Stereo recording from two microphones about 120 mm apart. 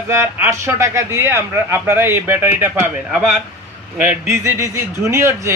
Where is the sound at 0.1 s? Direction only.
20° right (ahead or behind).